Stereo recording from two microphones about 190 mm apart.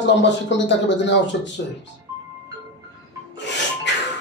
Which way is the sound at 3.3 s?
65° left (ahead or behind).